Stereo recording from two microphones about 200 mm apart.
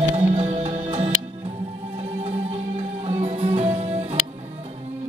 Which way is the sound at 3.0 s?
30° right (ahead or behind).